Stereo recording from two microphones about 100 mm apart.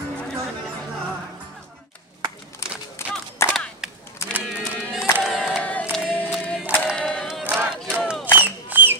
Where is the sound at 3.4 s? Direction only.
25° left (ahead or behind).